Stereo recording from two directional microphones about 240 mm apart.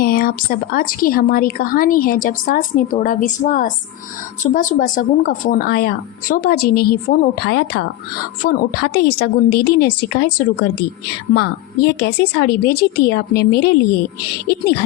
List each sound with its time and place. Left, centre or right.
0.0 s a woman's voice: left